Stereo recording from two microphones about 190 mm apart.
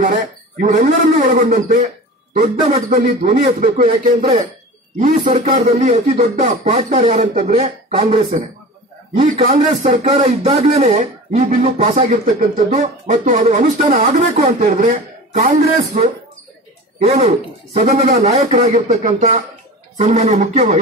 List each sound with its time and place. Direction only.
0.0 s a man's voice: 40° right (ahead or behind)
14.4 s a man's voice: 45° right (ahead or behind)